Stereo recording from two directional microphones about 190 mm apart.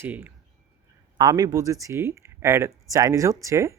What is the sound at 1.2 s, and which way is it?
Speech, 20° right (ahead or behind).